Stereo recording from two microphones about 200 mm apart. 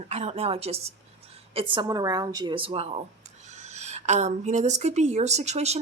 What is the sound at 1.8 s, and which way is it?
Speech, 20° right (ahead or behind).